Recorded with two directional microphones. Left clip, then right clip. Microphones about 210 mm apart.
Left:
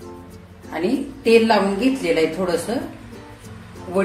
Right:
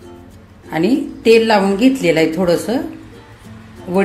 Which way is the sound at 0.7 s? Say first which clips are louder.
Right 6 dB; 40° right (ahead or behind).